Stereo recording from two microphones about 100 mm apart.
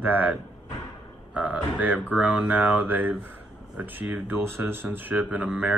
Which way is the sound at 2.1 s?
15° right (ahead or behind).